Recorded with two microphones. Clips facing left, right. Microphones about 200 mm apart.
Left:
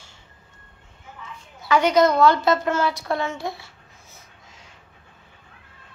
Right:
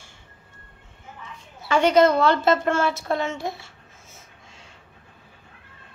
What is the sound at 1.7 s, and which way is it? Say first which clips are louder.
A woman's voice: right 1 dB; 30° right (ahead or behind).